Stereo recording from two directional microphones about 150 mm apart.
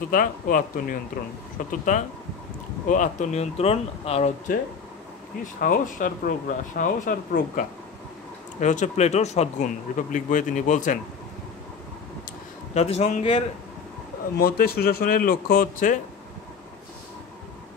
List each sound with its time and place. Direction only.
0.1 s speech: 65° left (ahead or behind)
1.2 s speech: 80° left
1.7 s speech: 55° left (ahead or behind)
4.5 s speech: 60° left (ahead or behind)
12.7 s speech: 45° left (ahead or behind)
14.4 s a man's voice: 90° left; by 16.0 s 65° left (ahead or behind)